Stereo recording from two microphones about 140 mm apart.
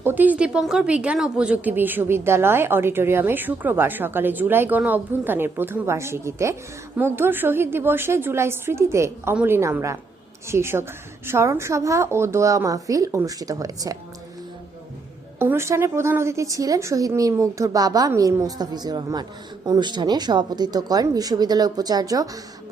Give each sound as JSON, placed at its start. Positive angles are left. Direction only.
{"t": 0.0, "sound": "a woman's voice", "side_deg": -15}
{"t": 15.4, "sound": "a woman's voice", "side_deg": -15}